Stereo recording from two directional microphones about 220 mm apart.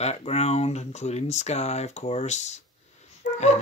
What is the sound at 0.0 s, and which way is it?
Speech, 30° left (ahead or behind).